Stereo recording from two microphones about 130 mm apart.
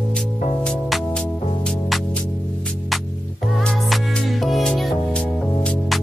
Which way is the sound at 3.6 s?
Centre (ahead or behind).